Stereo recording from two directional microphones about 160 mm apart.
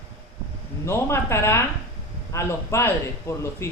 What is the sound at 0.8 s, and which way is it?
A man's voice, 15° left (ahead or behind).